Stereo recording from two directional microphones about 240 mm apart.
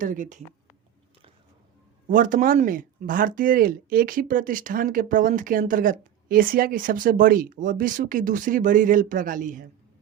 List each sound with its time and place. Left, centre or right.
0.0 s speech: right
2.0 s speech: right